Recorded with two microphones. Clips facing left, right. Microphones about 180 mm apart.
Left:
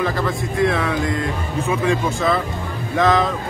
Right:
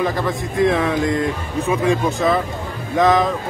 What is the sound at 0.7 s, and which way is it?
Speech, 20° right (ahead or behind).